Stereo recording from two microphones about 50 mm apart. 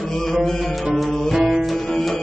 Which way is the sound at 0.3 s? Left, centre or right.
Centre.